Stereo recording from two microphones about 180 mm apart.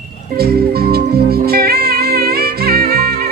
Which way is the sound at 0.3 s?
60° right (ahead or behind).